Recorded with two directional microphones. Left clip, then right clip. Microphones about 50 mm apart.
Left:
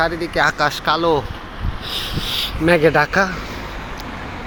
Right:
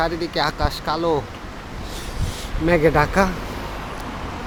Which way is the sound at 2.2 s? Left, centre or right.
Left.